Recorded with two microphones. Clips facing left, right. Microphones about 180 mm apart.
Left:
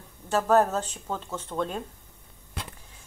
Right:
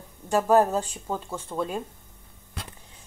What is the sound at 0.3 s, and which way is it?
Speech, 15° right (ahead or behind).